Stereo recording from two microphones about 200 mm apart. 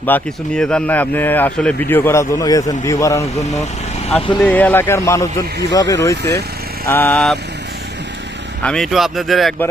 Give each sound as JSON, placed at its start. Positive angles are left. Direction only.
{"t": 0.0, "sound": "speech", "side_deg": 5}
{"t": 8.6, "sound": "speech", "side_deg": 5}